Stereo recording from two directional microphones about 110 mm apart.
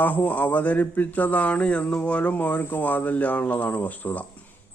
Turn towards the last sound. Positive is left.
turn(degrees=15)  # may be behind; listen again after turning